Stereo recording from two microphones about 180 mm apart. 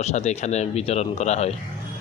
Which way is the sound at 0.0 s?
40° left (ahead or behind).